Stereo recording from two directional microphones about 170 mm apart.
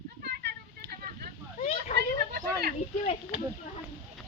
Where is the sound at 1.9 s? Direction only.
55° left (ahead or behind).